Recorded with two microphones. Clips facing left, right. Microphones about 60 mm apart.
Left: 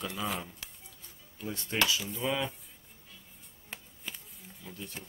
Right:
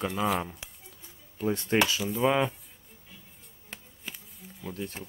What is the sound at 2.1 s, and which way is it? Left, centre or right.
Speech, right.